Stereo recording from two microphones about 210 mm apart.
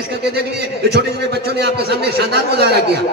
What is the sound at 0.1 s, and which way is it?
A man's voice, 50° right (ahead or behind).